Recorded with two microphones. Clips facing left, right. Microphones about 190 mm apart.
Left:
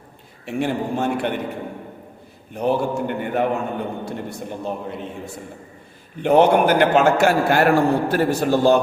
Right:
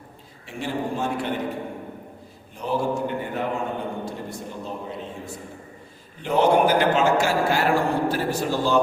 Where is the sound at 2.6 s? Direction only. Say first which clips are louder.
Left 4 dB; 60° left (ahead or behind).